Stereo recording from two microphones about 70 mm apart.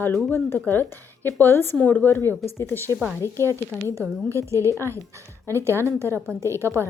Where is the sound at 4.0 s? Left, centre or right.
Right.